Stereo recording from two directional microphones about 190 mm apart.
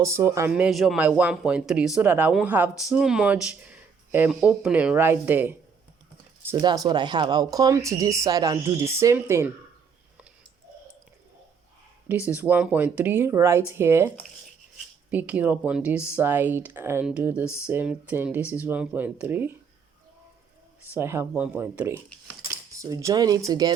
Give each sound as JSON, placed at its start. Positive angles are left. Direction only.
{"t": 0.0, "sound": "speech", "side_deg": -15}
{"t": 6.6, "sound": "speech", "side_deg": -20}
{"t": 12.0, "sound": "speech", "side_deg": -10}
{"t": 15.1, "sound": "speech", "side_deg": -10}
{"t": 20.9, "sound": "speech", "side_deg": -15}